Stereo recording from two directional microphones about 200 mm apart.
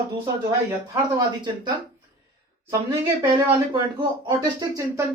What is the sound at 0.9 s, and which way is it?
Speech, 20° right (ahead or behind).